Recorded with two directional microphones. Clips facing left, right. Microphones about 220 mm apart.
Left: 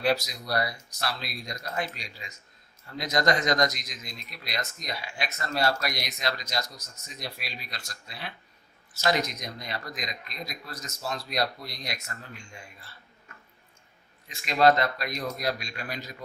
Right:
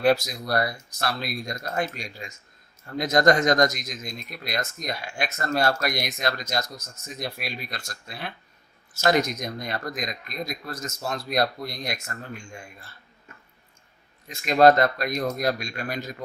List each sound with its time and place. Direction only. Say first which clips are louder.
0.0 s speech: right 5 dB; 50° right (ahead or behind)
14.3 s speech: right 5 dB; 45° right (ahead or behind)